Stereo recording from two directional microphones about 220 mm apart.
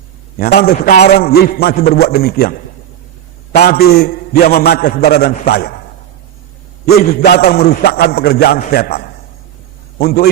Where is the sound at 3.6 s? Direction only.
45° left (ahead or behind).